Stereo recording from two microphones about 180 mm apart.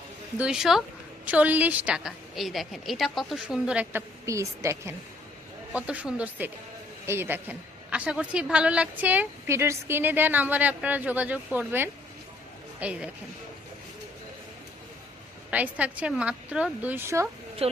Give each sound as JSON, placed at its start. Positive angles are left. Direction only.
{"t": 0.3, "sound": "a woman's voice", "side_deg": -5}
{"t": 15.4, "sound": "a woman's voice", "side_deg": -10}
{"t": 17.6, "sound": "speech", "side_deg": -35}